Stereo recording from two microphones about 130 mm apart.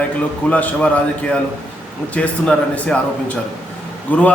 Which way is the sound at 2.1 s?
10° left (ahead or behind).